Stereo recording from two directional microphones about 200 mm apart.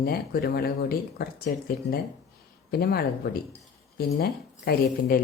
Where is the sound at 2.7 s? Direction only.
50° left (ahead or behind).